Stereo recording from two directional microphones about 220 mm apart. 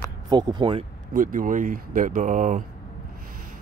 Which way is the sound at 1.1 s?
40° right (ahead or behind).